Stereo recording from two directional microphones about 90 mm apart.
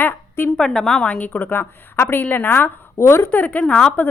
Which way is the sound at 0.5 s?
5° left (ahead or behind).